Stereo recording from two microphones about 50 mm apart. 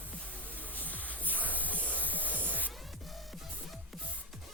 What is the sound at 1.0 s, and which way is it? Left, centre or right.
Music, left.